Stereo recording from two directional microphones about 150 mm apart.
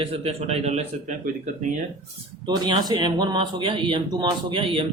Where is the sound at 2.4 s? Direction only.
30° right (ahead or behind).